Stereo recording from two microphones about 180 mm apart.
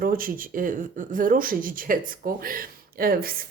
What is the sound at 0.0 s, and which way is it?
A woman's voice, 50° right (ahead or behind).